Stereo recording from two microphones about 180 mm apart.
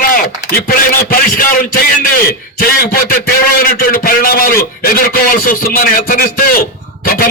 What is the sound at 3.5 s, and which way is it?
A man's voice, 55° left (ahead or behind).